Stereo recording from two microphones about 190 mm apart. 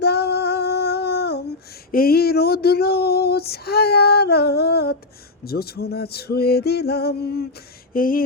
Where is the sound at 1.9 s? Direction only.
50° left (ahead or behind).